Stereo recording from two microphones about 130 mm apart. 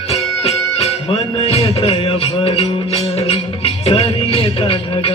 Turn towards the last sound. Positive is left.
turn(degrees=45)  # may be behind; listen again after turning